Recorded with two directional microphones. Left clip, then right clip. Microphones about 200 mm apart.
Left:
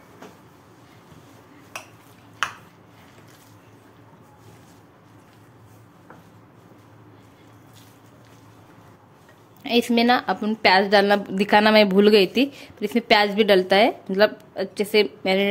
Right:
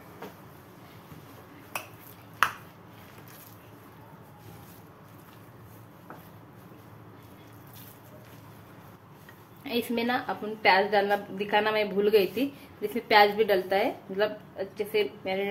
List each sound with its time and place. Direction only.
9.6 s a woman's voice: 45° left (ahead or behind)